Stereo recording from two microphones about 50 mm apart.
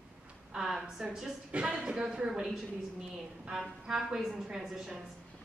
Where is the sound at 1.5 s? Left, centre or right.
Right.